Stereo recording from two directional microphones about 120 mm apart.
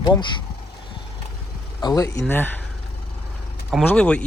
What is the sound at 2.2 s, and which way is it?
Speech, 15° left (ahead or behind).